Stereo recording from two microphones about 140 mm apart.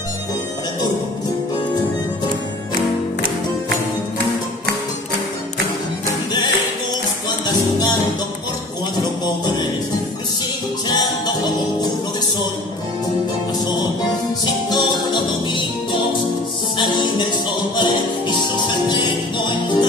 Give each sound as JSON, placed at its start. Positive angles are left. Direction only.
{"t": 7.4, "sound": "music", "side_deg": 30}
{"t": 14.4, "sound": "music", "side_deg": 30}